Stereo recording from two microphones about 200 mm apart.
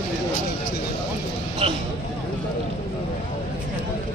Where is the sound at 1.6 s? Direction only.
30° right (ahead or behind).